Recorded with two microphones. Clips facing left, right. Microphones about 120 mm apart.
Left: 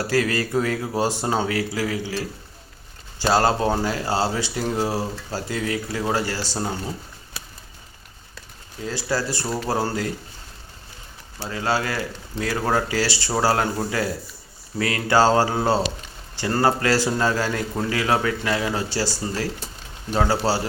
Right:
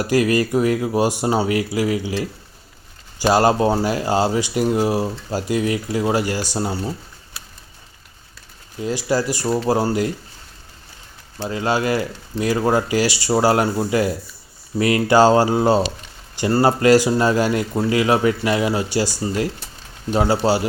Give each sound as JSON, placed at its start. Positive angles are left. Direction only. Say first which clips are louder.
{"t": 0.0, "sound": "speech", "louder": "right 5 dB", "side_deg": -15}
{"t": 8.8, "sound": "speech", "louder": "right 5 dB", "side_deg": -15}
{"t": 11.4, "sound": "speech", "louder": "right 4 dB", "side_deg": -20}